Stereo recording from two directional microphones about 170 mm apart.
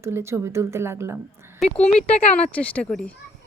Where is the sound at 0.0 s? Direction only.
15° right (ahead or behind).